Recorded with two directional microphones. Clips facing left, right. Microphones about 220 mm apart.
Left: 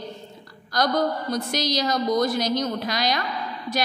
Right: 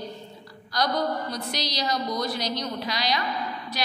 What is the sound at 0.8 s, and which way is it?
A woman's voice, 50° left (ahead or behind).